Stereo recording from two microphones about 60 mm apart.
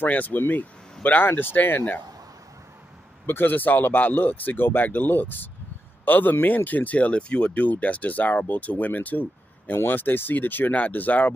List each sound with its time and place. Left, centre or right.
0.0 s speech: left
3.3 s speech: left